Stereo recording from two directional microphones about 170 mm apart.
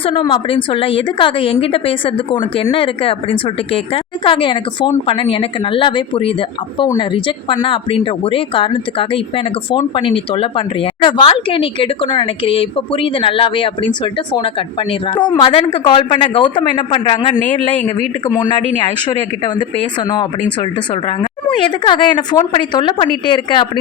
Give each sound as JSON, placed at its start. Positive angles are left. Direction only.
{"t": 0.0, "sound": "speech", "side_deg": 30}
{"t": 18.3, "sound": "speech", "side_deg": 25}